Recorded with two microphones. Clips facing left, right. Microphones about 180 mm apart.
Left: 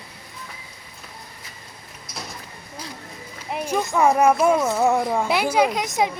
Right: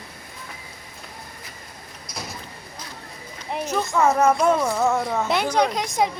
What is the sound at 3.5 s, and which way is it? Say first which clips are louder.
A woman's voice: left 1 dB; 10° left (ahead or behind).